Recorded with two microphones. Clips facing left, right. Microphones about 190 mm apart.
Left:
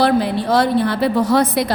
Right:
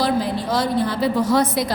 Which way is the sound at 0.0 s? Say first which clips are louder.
Left 5 dB; 65° left (ahead or behind).